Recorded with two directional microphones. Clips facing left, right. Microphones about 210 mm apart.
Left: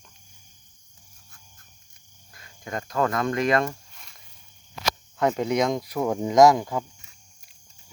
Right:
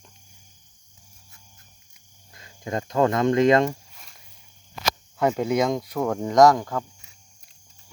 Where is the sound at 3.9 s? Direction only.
5° right (ahead or behind).